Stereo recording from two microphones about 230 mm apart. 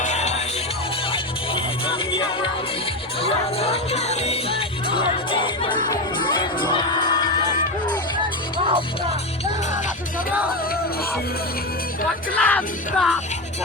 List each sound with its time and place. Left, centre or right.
0.0 s music: left
8.5 s music: centre
12.3 s music: centre